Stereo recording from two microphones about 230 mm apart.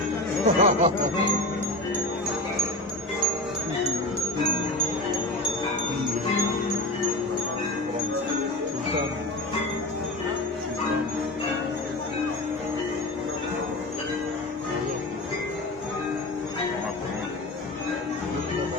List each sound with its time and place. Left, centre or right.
0.4 s speech: right